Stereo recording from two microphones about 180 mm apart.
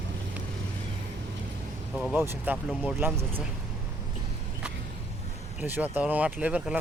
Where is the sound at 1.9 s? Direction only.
Centre (ahead or behind).